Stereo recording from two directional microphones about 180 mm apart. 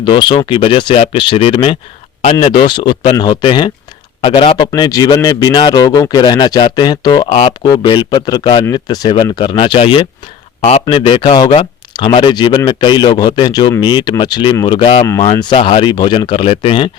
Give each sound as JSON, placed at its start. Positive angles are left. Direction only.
{"t": 0.0, "sound": "a man's voice", "side_deg": 25}
{"t": 15.0, "sound": "a man's voice", "side_deg": 15}